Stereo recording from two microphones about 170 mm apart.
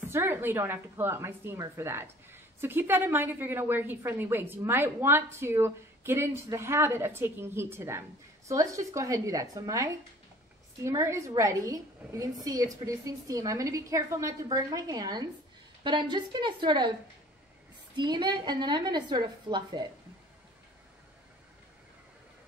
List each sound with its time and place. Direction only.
0.1 s a woman's voice: 15° right (ahead or behind)
17.9 s a woman's voice: 25° right (ahead or behind)